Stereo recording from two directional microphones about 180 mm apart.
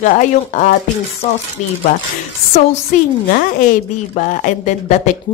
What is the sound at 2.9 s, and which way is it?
Speech, 45° left (ahead or behind).